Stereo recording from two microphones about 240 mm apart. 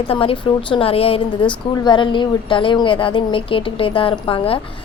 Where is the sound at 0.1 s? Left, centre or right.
Left.